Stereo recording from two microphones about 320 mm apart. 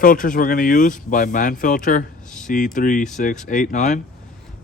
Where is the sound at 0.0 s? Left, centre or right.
Left.